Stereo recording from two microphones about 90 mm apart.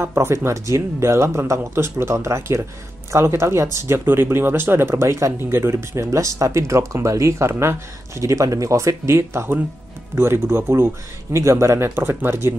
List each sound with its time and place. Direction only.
0.0 s speech: 30° right (ahead or behind)